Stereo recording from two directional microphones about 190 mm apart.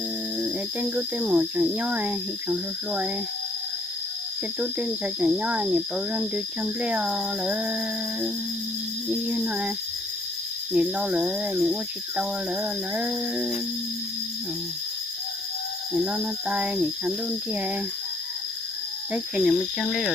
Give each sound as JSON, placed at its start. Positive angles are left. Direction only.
{"t": 0.3, "sound": "speech", "side_deg": -5}
{"t": 4.6, "sound": "speech", "side_deg": -5}
{"t": 9.0, "sound": "cricket", "side_deg": -5}
{"t": 16.0, "sound": "cricket", "side_deg": -5}
{"t": 17.5, "sound": "speech", "side_deg": -10}
{"t": 19.1, "sound": "cricket", "side_deg": 0}